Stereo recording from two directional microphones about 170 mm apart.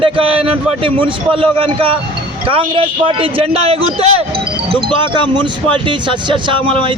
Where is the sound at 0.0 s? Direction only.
30° right (ahead or behind).